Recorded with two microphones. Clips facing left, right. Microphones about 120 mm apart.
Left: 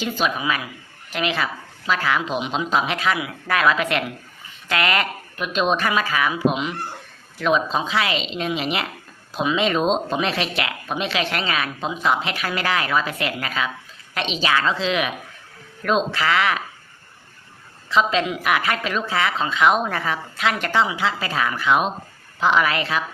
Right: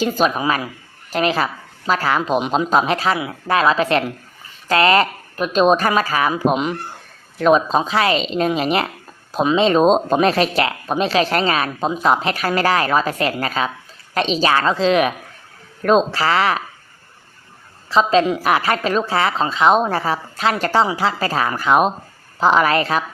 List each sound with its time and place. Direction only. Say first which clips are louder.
0.0 s speech: right 5 dB; 40° right (ahead or behind)
17.8 s speech: right 5 dB; 35° right (ahead or behind)